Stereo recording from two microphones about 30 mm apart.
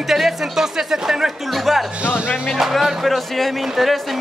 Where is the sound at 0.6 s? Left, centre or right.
Centre.